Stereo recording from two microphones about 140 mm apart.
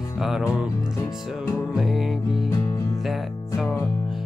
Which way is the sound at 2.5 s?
25° left (ahead or behind).